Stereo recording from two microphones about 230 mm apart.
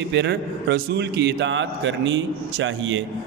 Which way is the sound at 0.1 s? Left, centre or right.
Right.